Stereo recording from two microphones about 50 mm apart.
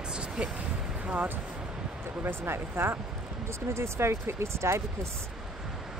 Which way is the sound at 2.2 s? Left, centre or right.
Right.